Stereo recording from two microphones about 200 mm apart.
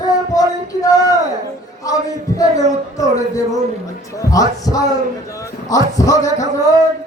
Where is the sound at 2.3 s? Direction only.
15° left (ahead or behind).